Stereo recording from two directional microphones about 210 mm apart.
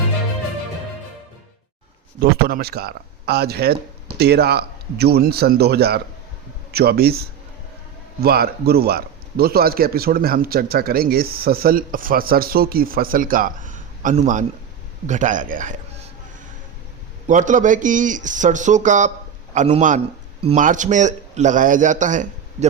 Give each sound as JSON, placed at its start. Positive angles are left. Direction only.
{"t": 2.5, "sound": "speech", "side_deg": -50}
{"t": 17.2, "sound": "speech", "side_deg": -35}